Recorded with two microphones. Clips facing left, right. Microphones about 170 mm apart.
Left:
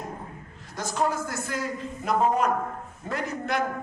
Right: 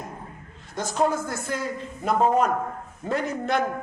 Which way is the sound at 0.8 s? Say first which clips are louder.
Right 3 dB; 25° right (ahead or behind).